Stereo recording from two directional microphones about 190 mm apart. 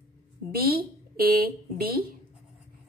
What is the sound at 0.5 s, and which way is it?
A woman's voice, 50° right (ahead or behind).